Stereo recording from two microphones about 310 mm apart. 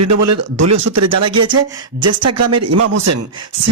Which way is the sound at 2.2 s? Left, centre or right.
Right.